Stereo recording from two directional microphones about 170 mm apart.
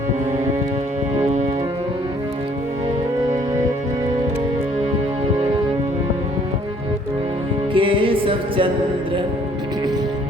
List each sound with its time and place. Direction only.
7.7 s music: 30° right (ahead or behind)